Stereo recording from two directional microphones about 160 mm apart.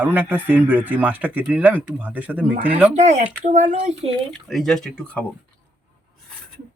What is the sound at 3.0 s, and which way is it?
Speech, 50° right (ahead or behind).